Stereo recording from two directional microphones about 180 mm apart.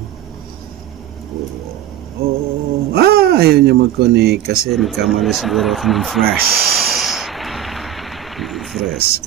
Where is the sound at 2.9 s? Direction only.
60° right (ahead or behind).